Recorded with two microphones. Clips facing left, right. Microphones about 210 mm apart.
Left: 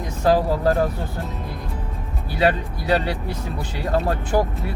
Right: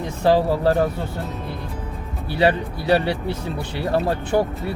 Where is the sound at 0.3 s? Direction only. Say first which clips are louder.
Right 1 dB; 25° right (ahead or behind).